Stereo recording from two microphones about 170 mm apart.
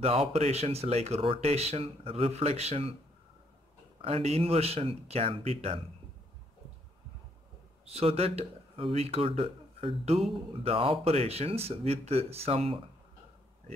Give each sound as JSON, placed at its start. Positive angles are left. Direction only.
{"t": 0.0, "sound": "speech", "side_deg": -35}
{"t": 4.0, "sound": "speech", "side_deg": -35}
{"t": 7.8, "sound": "speech", "side_deg": -35}